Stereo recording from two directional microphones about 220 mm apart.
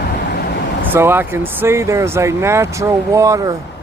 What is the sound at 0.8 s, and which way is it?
Speech, 10° right (ahead or behind).